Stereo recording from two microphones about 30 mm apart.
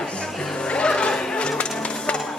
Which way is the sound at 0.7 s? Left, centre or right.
Left.